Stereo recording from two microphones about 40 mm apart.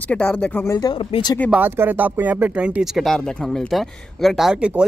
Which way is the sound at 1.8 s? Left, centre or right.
Right.